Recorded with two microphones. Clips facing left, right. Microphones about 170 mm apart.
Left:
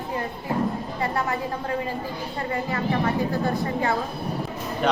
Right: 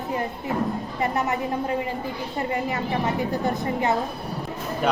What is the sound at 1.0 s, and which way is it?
A woman's voice, 20° right (ahead or behind).